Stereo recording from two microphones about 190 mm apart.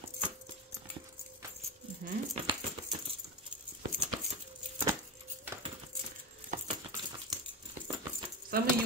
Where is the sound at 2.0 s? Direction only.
50° right (ahead or behind).